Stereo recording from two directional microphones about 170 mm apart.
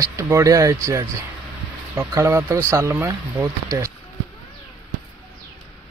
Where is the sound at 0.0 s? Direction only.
15° right (ahead or behind).